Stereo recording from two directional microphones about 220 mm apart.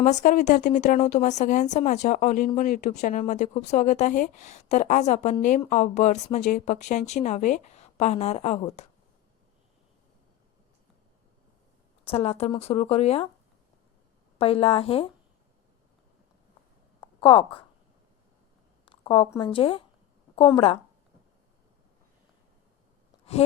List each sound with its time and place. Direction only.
0.0 s speech: 35° left (ahead or behind)
12.0 s speech: 25° left (ahead or behind)
14.3 s speech: 25° left (ahead or behind)
17.0 s a sound: 20° left (ahead or behind)
18.9 s speech: 20° left (ahead or behind)